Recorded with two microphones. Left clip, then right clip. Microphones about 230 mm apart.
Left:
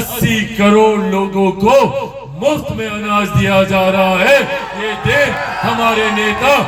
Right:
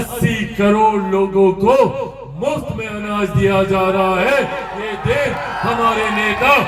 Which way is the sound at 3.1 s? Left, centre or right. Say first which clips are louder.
Left 3 dB; left.